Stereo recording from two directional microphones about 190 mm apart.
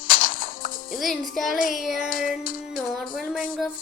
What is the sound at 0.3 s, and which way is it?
Music, 50° left (ahead or behind).